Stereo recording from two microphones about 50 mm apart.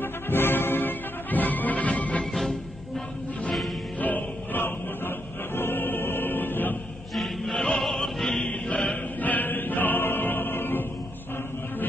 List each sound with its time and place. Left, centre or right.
0.0 s music: left
4.0 s music: left
7.2 s music: centre
7.8 s opera: centre
8.5 s choir: left